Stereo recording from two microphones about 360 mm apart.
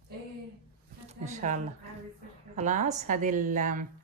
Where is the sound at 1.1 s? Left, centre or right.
Centre.